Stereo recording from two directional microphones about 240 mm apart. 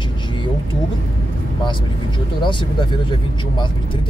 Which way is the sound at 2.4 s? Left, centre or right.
Centre.